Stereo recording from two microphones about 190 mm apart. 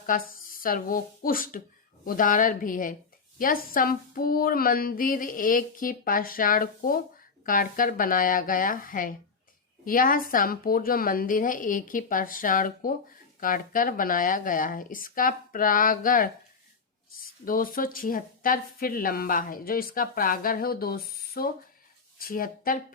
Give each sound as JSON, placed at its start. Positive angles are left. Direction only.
{"t": 0.3, "sound": "speech", "side_deg": 50}
{"t": 17.4, "sound": "speech", "side_deg": 50}